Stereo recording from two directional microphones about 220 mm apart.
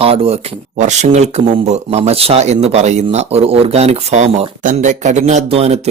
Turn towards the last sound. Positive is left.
turn(degrees=-30)  # may be behind; listen again after turning